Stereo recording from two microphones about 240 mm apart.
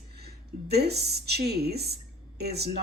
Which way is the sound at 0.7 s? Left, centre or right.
Right.